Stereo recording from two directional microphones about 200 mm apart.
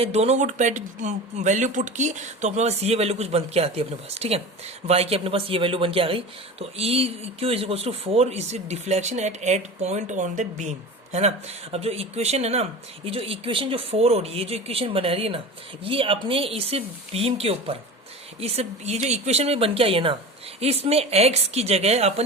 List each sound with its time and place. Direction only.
0.0 s speech: 30° right (ahead or behind)